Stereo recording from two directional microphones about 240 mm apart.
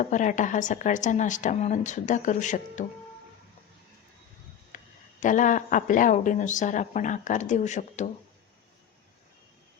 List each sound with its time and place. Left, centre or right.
0.0 s speech: left
4.7 s a sound: left
5.2 s speech: left